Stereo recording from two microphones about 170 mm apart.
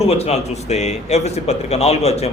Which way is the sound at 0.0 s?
35° left (ahead or behind).